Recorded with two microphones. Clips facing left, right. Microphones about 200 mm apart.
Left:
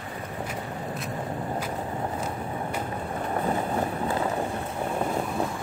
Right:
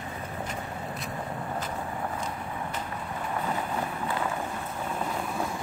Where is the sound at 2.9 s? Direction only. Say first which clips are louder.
Left 3 dB; 40° left (ahead or behind).